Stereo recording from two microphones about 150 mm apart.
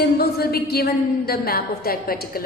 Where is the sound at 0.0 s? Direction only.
90° left.